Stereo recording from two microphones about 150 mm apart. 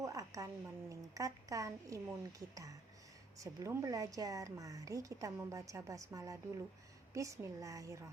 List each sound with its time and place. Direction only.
0.0 s speech: 20° right (ahead or behind)